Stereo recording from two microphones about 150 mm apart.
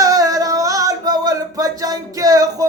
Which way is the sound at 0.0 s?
25° right (ahead or behind).